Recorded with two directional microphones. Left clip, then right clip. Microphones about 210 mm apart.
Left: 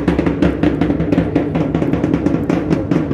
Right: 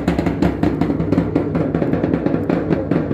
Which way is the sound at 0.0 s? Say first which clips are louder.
Left 3 dB; 60° right (ahead or behind).